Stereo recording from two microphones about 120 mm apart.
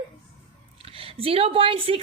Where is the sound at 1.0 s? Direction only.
50° right (ahead or behind).